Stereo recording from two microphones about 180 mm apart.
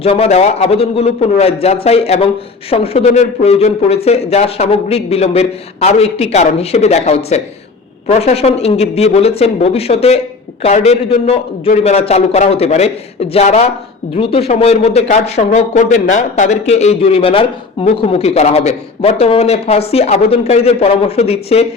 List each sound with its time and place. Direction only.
0.0 s a man's voice: 35° left (ahead or behind)